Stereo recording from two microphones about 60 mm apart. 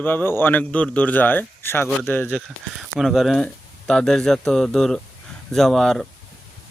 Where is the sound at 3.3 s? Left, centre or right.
Centre.